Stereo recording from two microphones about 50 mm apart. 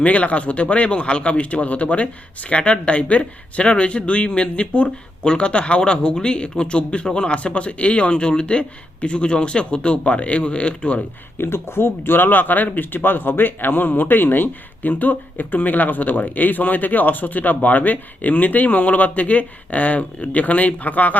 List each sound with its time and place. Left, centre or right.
0.0 s speech: left
11.3 s speech: left